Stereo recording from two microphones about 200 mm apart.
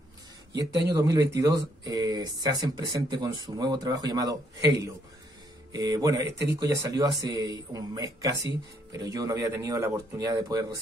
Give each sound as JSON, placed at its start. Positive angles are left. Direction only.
{"t": 0.6, "sound": "speech", "side_deg": -15}